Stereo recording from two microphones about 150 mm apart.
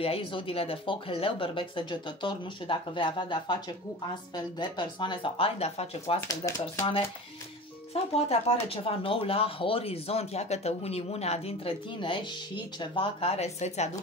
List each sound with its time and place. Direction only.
0.0 s speech: 35° left (ahead or behind)
7.9 s speech: 40° left (ahead or behind)